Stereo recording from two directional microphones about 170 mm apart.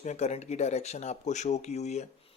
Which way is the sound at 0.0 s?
45° left (ahead or behind).